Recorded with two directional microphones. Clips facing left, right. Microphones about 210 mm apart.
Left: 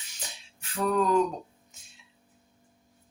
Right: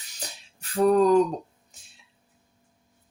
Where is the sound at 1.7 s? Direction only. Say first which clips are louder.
Even; 35° right (ahead or behind).